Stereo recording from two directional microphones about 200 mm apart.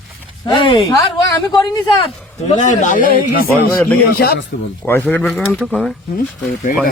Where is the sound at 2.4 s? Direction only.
35° left (ahead or behind).